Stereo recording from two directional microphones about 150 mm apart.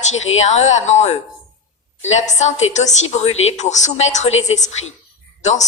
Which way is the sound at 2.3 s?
50° left (ahead or behind).